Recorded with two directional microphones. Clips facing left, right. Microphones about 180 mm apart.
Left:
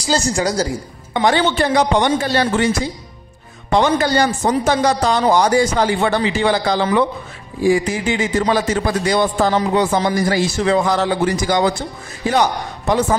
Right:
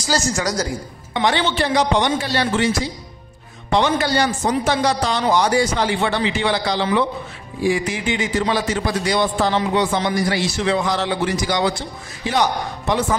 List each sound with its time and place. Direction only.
0.4 s a woman's voice: 30° left (ahead or behind)
1.1 s a man's voice: 45° left (ahead or behind)
3.7 s a man's voice: 45° left (ahead or behind)